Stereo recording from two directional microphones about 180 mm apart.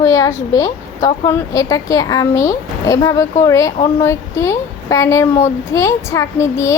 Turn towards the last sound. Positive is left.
turn(degrees=15)  # may be behind; listen again after turning